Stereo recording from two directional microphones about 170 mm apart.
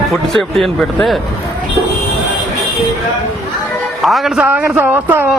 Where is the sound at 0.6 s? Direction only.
Centre (ahead or behind).